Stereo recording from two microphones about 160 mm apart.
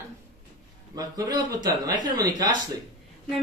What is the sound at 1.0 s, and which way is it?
Speech, 25° right (ahead or behind).